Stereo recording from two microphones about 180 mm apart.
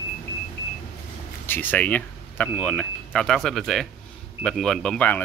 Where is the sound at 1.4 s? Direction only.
10° left (ahead or behind).